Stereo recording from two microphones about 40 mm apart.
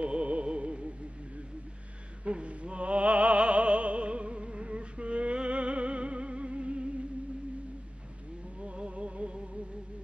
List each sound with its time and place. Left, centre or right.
0.0 s music: right
2.2 s music: right
8.5 s music: right